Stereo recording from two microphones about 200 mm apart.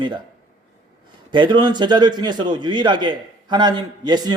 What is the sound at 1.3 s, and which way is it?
A man's voice, 25° right (ahead or behind).